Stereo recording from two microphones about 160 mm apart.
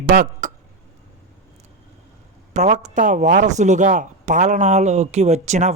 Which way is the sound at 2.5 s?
50° right (ahead or behind).